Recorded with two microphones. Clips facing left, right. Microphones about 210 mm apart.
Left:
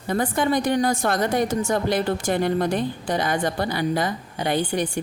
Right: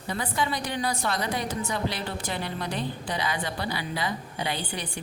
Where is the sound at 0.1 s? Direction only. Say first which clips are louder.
Left 8 dB; 50° left (ahead or behind).